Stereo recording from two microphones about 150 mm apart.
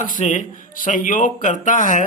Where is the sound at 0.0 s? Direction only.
60° left (ahead or behind).